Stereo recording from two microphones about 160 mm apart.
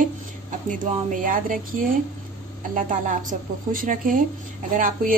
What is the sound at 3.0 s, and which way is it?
A woman's voice, 60° right (ahead or behind).